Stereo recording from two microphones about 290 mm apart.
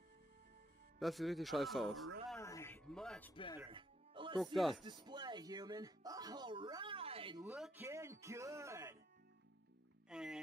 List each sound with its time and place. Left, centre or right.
0.9 s speech: centre
2.3 s a sound: centre
3.5 s music: centre
4.6 s speech: centre
4.8 s speech: centre
7.5 s speech: centre
10.0 s music: centre